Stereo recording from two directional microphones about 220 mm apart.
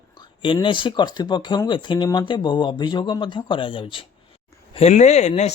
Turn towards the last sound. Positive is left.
turn(degrees=30)  # may be behind; listen again after turning